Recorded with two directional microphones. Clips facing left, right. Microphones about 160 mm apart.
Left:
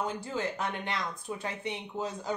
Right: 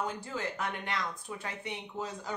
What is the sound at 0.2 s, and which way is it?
Speech, 25° left (ahead or behind).